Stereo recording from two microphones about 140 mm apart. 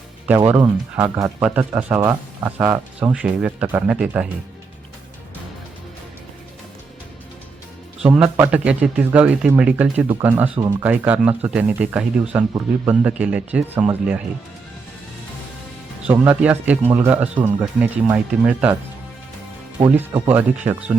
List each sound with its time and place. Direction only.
0.3 s speech: 15° right (ahead or behind)
8.0 s speech: 10° right (ahead or behind)
10.6 s speech: 25° right (ahead or behind)
10.8 s speech: 10° right (ahead or behind)
16.2 s speech: 10° right (ahead or behind)
20.2 s speech: 15° right (ahead or behind)